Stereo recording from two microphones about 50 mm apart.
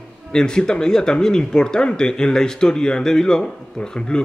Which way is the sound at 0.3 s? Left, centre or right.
Centre.